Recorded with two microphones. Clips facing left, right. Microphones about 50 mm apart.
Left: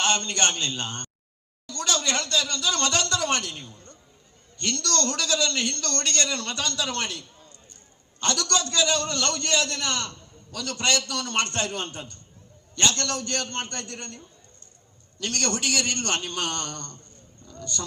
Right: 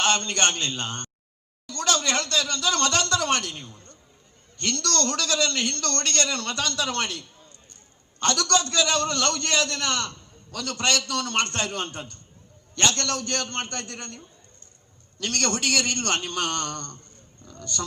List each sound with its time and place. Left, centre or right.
0.0 s speech: right
5.3 s speech: right
8.2 s a man's voice: right